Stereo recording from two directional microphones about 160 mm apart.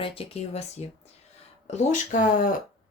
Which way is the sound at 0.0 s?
35° left (ahead or behind).